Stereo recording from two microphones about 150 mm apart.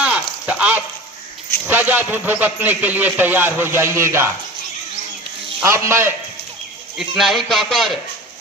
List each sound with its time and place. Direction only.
0.0 s a sound: 5° right (ahead or behind)
1.6 s a man's voice: 15° right (ahead or behind)
5.6 s a man's voice: 20° right (ahead or behind)
7.0 s a man's voice: centre (ahead or behind)